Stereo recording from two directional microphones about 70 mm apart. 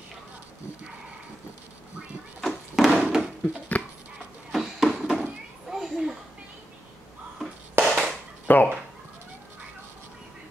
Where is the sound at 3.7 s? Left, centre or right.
Left.